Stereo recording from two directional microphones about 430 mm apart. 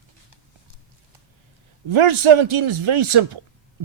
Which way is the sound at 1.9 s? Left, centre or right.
Right.